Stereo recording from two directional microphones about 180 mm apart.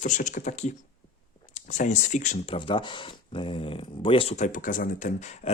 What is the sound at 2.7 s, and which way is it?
Speech, 25° left (ahead or behind).